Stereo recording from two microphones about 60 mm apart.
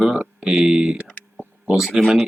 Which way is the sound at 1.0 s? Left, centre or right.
Left.